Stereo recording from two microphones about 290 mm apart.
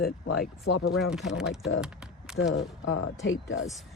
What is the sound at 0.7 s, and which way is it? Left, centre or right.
Speech, left.